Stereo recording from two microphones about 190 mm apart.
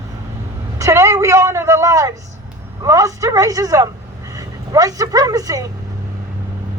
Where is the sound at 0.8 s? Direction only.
15° right (ahead or behind).